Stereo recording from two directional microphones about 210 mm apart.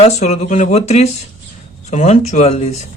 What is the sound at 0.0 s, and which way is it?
Speech, 30° left (ahead or behind).